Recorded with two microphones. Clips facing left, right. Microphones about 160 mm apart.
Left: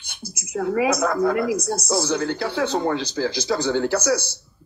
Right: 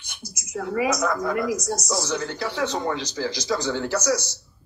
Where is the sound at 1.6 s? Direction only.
30° left (ahead or behind).